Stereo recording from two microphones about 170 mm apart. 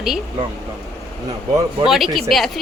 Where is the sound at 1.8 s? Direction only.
Centre (ahead or behind).